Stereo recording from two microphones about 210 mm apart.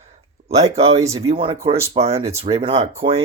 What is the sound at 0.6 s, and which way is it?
Speech, 30° right (ahead or behind).